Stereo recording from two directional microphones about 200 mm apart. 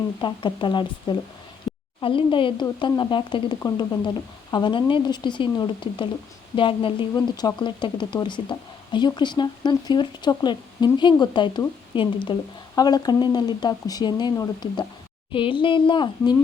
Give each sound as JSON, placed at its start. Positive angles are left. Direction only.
{"t": 0.2, "sound": "speech", "side_deg": 25}
{"t": 1.7, "sound": "a sound", "side_deg": 25}
{"t": 2.0, "sound": "speech", "side_deg": 25}